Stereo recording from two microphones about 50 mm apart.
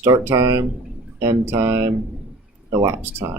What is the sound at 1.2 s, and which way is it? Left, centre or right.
Speech, right.